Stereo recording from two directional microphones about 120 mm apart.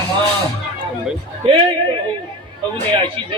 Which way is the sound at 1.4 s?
45° right (ahead or behind).